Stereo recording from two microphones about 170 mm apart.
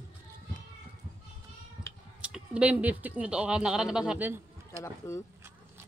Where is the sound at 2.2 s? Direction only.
5° right (ahead or behind).